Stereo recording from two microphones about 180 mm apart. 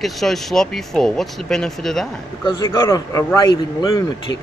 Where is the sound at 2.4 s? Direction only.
20° left (ahead or behind).